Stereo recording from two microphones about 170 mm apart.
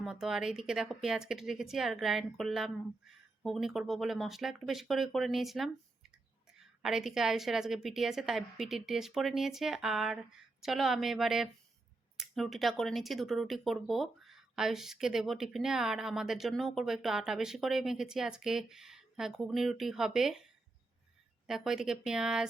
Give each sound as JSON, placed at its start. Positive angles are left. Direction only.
{"t": 0.0, "sound": "speech", "side_deg": 0}
{"t": 21.4, "sound": "speech", "side_deg": 0}